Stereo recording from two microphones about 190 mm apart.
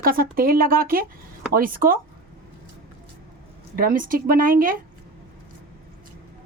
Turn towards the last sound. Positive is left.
turn(degrees=-45)  # may be behind; listen again after turning